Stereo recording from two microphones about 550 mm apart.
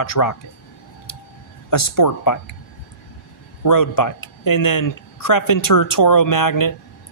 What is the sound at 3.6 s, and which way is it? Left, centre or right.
Speech, left.